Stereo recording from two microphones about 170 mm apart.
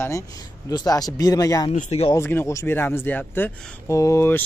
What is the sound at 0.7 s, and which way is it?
A man's voice, 20° left (ahead or behind).